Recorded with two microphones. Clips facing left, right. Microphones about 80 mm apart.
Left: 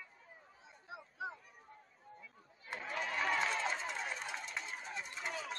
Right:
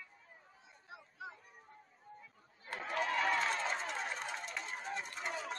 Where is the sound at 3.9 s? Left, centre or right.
Right.